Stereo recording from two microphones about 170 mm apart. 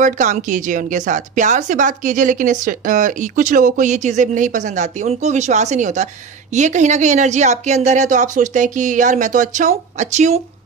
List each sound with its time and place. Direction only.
0.0 s speech: 45° right (ahead or behind)